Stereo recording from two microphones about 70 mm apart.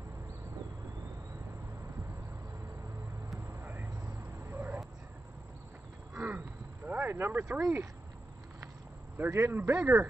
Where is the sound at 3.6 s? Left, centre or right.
Right.